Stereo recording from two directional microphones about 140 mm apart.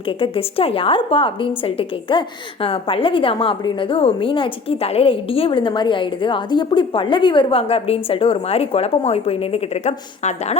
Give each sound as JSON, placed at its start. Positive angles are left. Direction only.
{"t": 0.2, "sound": "a woman's voice", "side_deg": 40}